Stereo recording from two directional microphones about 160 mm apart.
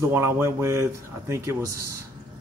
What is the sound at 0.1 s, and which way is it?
Speech, 15° right (ahead or behind).